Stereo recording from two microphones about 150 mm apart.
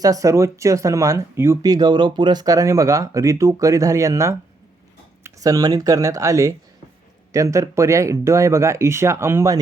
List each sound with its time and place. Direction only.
0.0 s speech: 20° right (ahead or behind)